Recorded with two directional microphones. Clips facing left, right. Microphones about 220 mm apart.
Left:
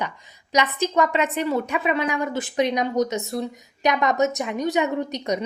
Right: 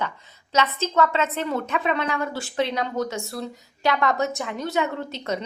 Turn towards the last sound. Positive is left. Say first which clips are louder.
# left 4 dB
turn(degrees=15)  # may be behind; listen again after turning